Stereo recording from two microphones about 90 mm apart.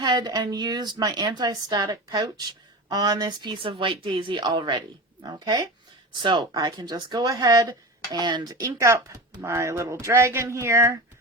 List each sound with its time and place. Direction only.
0.0 s speech: 50° right (ahead or behind)
8.2 s speech: 55° right (ahead or behind)
8.5 s speech: 30° right (ahead or behind)